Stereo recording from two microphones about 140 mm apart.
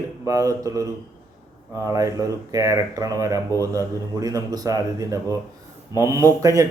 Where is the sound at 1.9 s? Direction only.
25° right (ahead or behind).